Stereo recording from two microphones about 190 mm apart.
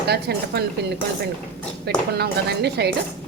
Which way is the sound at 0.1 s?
60° right (ahead or behind).